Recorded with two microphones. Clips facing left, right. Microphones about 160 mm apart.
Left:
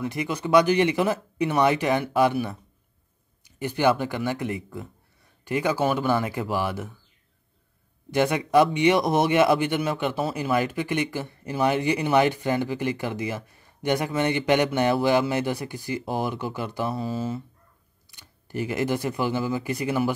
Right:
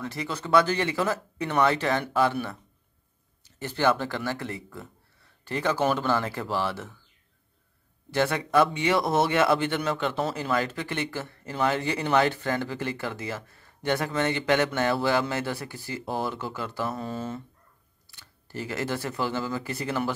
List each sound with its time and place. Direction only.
0.0 s speech: 15° left (ahead or behind)
3.4 s speech: 15° left (ahead or behind)
8.1 s speech: 15° left (ahead or behind)
17.0 s speech: 5° left (ahead or behind)
18.0 s speech: 15° left (ahead or behind)